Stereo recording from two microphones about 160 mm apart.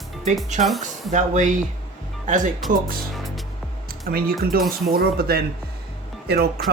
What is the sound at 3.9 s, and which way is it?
Speech, 70° right (ahead or behind).